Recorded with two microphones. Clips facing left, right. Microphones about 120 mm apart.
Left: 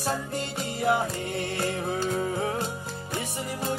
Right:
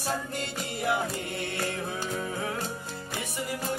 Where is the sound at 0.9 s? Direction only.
30° left (ahead or behind).